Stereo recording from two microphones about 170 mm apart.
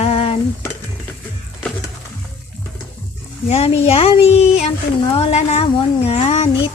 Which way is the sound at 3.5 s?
35° left (ahead or behind).